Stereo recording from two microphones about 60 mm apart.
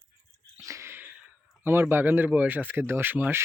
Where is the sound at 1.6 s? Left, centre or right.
Right.